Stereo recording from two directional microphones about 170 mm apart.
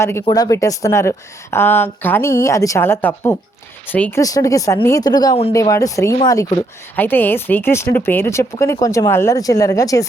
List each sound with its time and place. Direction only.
0.0 s speech: 15° left (ahead or behind)
4.2 s speech: 20° left (ahead or behind)